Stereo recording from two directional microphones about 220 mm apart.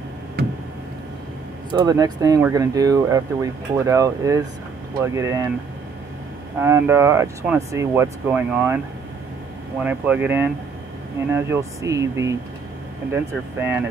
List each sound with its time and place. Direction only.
1.8 s speech: 20° right (ahead or behind)
6.6 s speech: 10° right (ahead or behind)
9.8 s speech: 5° right (ahead or behind)